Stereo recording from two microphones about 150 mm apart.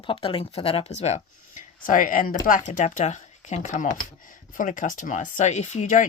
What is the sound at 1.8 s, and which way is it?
Speech, 60° left (ahead or behind).